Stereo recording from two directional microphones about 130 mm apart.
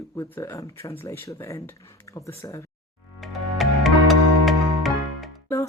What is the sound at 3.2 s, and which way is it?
Music, centre (ahead or behind).